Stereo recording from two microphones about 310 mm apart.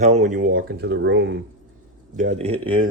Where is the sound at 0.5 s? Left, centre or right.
Right.